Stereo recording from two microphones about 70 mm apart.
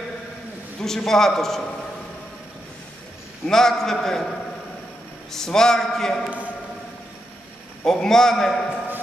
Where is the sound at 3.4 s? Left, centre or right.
Centre.